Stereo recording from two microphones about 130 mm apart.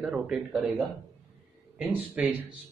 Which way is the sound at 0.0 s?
5° right (ahead or behind).